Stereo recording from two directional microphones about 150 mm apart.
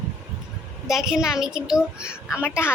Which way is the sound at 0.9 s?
5° right (ahead or behind).